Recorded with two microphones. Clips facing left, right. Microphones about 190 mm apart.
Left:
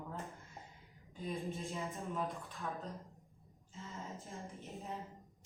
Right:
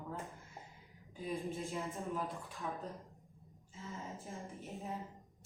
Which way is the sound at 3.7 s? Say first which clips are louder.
Right 1 dB; centre (ahead or behind).